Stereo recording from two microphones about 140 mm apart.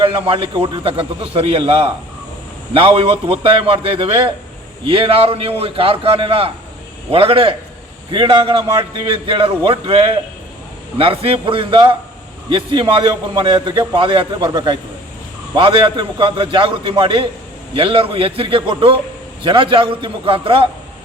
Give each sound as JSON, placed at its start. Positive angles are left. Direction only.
{"t": 0.0, "sound": "a man's voice", "side_deg": -40}